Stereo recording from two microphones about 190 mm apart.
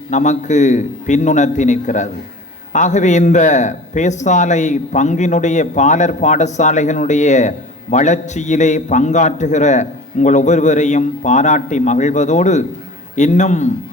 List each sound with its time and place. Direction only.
0.1 s a man's voice: 40° left (ahead or behind)